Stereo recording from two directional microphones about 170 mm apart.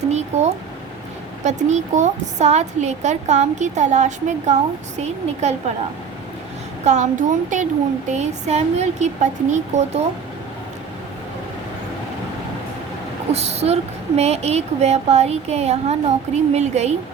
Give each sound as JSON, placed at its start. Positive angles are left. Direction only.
{"t": 0.1, "sound": "a sound", "side_deg": -40}
{"t": 1.5, "sound": "a woman's voice", "side_deg": -45}
{"t": 6.8, "sound": "a woman's voice", "side_deg": -45}
{"t": 13.3, "sound": "speech", "side_deg": -40}